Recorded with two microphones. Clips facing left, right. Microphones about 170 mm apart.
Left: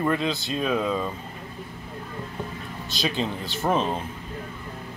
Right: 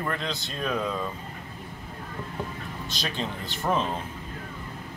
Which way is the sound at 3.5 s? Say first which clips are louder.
Left 2 dB; 20° left (ahead or behind).